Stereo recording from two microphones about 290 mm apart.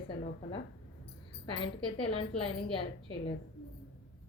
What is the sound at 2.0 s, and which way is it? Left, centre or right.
Speech, centre.